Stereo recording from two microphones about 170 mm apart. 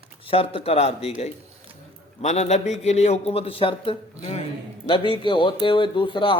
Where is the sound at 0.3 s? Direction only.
35° left (ahead or behind).